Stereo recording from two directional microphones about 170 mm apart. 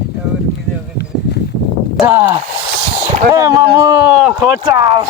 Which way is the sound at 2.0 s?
15° right (ahead or behind).